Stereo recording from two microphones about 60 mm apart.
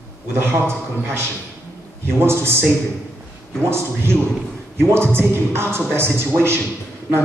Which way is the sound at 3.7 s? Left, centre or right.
Right.